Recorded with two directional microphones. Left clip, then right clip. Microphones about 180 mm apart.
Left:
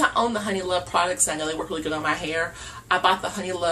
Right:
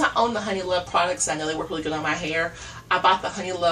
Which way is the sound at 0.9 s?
15° left (ahead or behind).